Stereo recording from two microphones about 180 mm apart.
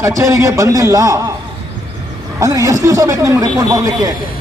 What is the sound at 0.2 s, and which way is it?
A man's voice, 15° right (ahead or behind).